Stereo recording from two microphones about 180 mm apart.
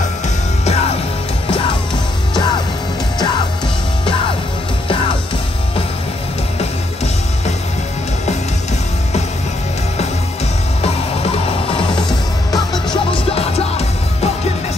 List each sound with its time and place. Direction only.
10.8 s music: 35° left (ahead or behind)